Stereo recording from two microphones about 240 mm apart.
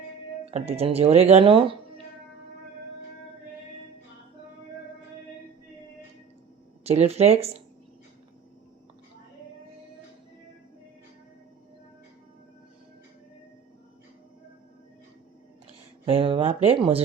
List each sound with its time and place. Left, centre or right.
0.4 s speech: right
6.8 s speech: right
16.0 s speech: right